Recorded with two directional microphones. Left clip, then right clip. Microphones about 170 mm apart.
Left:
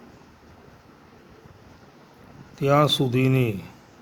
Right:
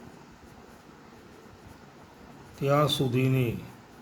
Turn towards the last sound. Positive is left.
turn(degrees=55)  # may be behind; listen again after turning